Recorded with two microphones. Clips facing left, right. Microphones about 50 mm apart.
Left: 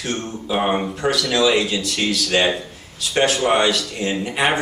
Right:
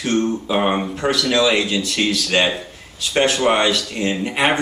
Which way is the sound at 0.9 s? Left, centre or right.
Right.